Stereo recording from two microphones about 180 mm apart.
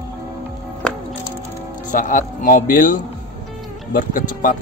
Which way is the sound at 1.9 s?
45° left (ahead or behind).